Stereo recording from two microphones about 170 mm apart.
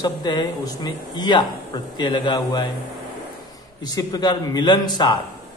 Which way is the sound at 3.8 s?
20° left (ahead or behind).